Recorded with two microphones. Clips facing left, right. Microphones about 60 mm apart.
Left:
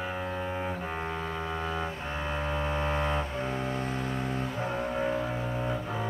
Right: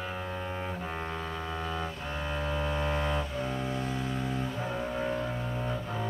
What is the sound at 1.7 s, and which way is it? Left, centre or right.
Double bass, centre.